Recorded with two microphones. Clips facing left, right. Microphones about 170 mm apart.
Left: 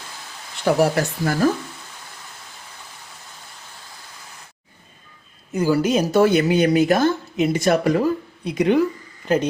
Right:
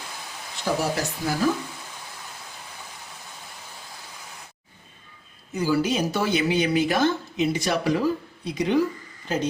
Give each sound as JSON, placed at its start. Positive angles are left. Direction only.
{"t": 0.6, "sound": "speech", "side_deg": 65}
{"t": 5.5, "sound": "a woman's voice", "side_deg": 50}